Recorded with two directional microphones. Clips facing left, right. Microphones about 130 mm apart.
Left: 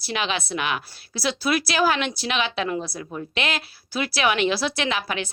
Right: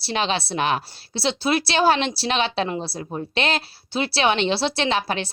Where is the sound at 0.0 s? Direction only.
30° right (ahead or behind).